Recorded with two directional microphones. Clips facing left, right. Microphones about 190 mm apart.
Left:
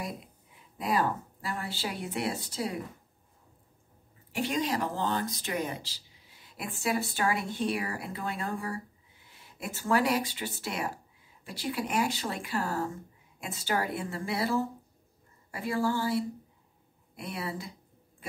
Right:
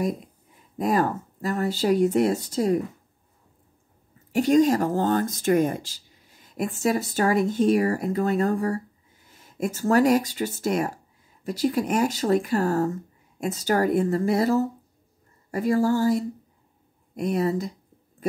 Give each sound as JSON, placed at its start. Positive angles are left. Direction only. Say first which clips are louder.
{"t": 0.7, "sound": "speech", "louder": "right 6 dB", "side_deg": -45}
{"t": 4.3, "sound": "speech", "louder": "right 12 dB", "side_deg": -45}